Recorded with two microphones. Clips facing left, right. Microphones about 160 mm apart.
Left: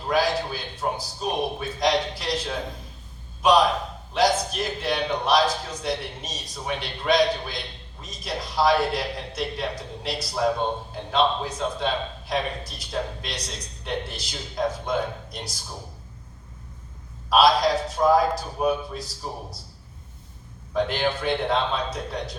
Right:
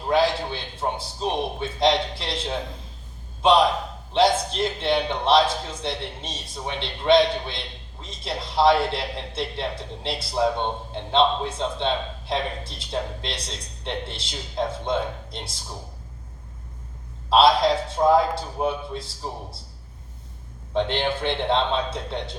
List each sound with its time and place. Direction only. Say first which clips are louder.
0.1 s a man's voice: right 2 dB; 25° right (ahead or behind)
17.2 s a man's voice: right 1 dB; 25° right (ahead or behind)
20.7 s a man's voice: right 1 dB; 25° right (ahead or behind)